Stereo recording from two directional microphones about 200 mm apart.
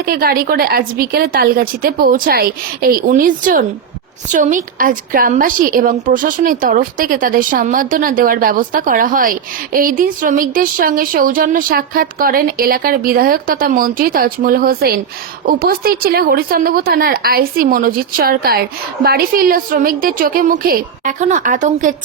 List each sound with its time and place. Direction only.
0.0 s a woman's voice: 50° right (ahead or behind)